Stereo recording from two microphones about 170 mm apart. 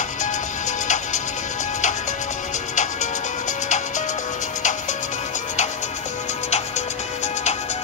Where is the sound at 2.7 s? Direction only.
45° left (ahead or behind).